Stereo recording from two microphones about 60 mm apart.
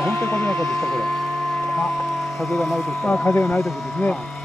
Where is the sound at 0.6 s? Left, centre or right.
Centre.